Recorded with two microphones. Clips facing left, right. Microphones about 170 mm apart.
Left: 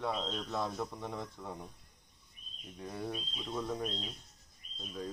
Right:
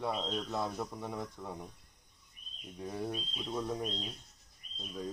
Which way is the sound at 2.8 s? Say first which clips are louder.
Right 2 dB; 10° right (ahead or behind).